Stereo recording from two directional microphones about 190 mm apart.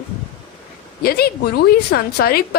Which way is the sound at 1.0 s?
55° left (ahead or behind).